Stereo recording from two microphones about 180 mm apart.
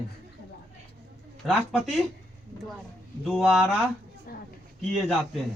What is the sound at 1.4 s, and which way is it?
Speech, centre (ahead or behind).